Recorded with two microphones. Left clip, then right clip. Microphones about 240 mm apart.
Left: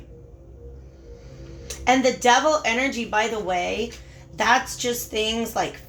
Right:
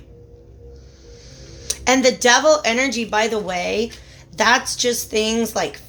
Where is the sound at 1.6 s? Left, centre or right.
Right.